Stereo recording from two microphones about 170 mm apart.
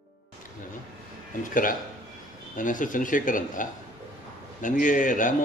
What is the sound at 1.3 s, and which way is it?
A man's voice, 55° left (ahead or behind).